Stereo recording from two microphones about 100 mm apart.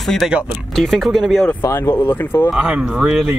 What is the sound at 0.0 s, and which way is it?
Speech, 5° left (ahead or behind).